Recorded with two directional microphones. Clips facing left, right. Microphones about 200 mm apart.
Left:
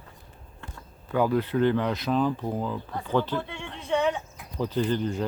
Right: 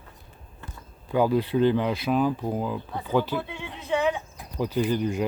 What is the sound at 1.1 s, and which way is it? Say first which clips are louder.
Speech: right 2 dB; 15° right (ahead or behind).